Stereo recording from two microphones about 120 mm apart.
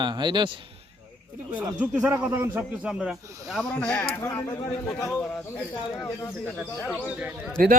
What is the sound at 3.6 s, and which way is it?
Speech, 10° left (ahead or behind).